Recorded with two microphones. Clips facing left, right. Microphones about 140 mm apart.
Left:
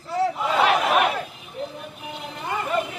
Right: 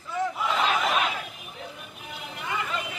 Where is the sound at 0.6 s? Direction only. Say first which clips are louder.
Left 7 dB; 70° left (ahead or behind).